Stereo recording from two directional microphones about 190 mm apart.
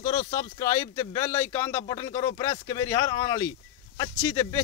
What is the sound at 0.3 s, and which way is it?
Speech, 15° left (ahead or behind).